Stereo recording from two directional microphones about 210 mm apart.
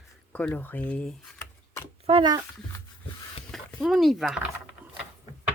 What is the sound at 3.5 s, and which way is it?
Speech, centre (ahead or behind).